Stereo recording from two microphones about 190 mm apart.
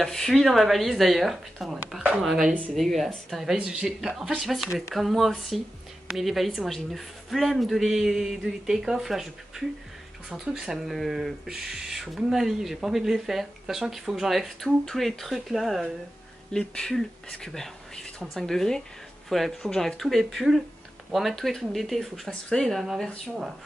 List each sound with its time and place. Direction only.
0.0 s speech: centre (ahead or behind)
10.3 s speech: 5° right (ahead or behind)